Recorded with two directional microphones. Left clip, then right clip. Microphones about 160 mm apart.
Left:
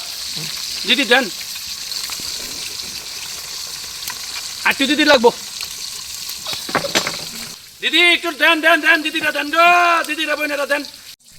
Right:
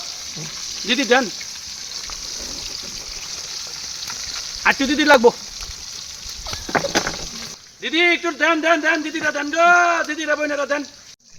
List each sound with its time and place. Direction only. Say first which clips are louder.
0.9 s a man's voice: left 3 dB; centre (ahead or behind)
4.6 s a man's voice: left 2 dB; centre (ahead or behind)
6.7 s a sound: left 1 dB; 35° right (ahead or behind)
7.9 s a man's voice: left 4 dB; centre (ahead or behind)